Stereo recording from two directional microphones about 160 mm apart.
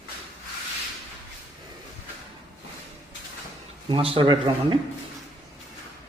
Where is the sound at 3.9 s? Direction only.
35° right (ahead or behind).